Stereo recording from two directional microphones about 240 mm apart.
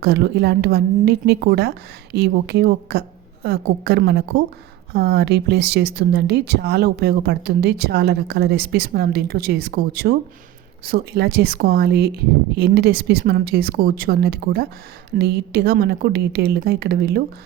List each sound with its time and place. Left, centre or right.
0.0 s a woman's voice: right